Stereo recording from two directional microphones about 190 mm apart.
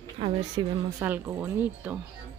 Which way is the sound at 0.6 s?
25° right (ahead or behind).